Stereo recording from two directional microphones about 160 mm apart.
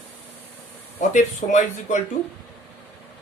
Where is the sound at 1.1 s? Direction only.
50° left (ahead or behind).